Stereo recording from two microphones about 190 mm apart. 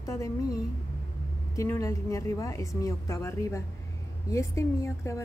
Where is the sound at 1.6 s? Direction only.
15° left (ahead or behind).